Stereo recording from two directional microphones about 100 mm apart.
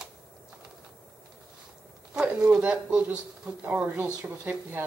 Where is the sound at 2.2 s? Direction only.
10° right (ahead or behind).